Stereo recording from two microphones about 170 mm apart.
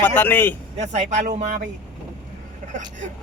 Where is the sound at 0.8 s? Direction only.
40° right (ahead or behind).